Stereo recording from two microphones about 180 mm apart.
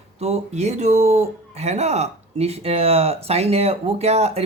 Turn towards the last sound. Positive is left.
turn(degrees=-35)  # may be behind; listen again after turning